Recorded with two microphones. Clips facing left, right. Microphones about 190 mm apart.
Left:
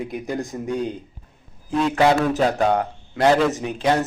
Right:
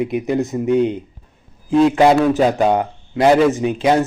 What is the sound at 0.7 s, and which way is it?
Speech, 65° right (ahead or behind).